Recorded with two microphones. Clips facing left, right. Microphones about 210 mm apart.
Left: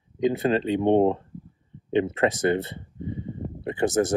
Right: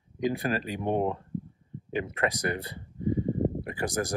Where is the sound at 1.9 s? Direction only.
25° left (ahead or behind).